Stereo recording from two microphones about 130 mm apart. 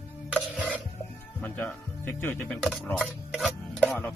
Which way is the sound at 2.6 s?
5° right (ahead or behind).